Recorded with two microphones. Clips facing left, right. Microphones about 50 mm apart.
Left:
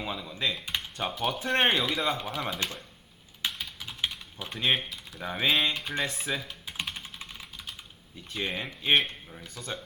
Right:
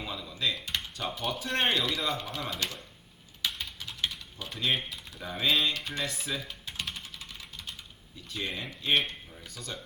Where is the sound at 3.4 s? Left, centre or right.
Left.